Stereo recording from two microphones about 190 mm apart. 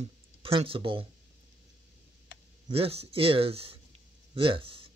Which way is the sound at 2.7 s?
30° right (ahead or behind).